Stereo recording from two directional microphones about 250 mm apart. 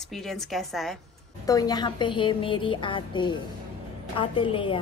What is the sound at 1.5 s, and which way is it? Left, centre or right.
A woman's voice, centre.